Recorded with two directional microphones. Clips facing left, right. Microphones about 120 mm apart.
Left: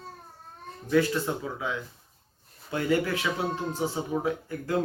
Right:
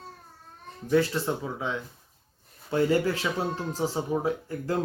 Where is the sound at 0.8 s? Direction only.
30° right (ahead or behind).